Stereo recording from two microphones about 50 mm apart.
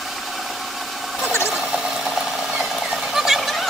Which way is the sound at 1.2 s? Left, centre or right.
Left.